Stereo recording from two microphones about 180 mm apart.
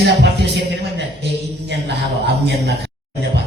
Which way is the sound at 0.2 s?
65° right (ahead or behind).